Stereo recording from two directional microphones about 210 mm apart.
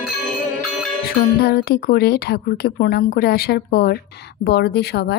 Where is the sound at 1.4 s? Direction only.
45° left (ahead or behind).